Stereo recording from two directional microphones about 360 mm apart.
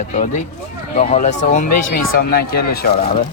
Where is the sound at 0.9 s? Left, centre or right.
Centre.